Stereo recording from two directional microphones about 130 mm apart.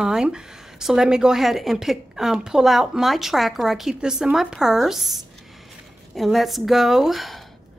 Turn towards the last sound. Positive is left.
turn(degrees=0)  # may be behind; listen again after turning